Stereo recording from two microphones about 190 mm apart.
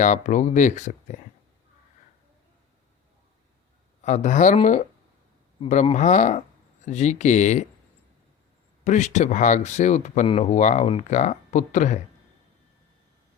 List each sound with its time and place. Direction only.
0.0 s speech: 40° left (ahead or behind)
4.0 s speech: 40° left (ahead or behind)
8.8 s speech: 40° left (ahead or behind)